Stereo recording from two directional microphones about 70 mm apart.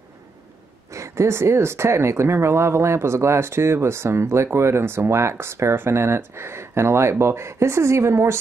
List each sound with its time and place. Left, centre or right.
0.9 s speech: right